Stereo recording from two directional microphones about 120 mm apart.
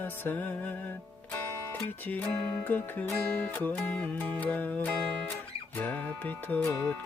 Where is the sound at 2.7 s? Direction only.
15° left (ahead or behind).